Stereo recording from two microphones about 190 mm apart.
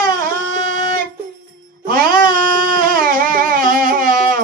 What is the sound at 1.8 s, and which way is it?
Music, 50° right (ahead or behind).